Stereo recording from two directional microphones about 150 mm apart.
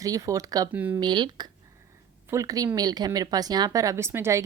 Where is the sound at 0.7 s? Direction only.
10° right (ahead or behind).